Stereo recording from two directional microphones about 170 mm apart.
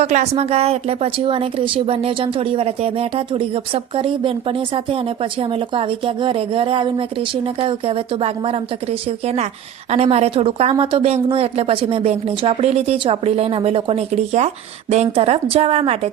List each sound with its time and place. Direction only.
0.0 s a woman's voice: 40° right (ahead or behind)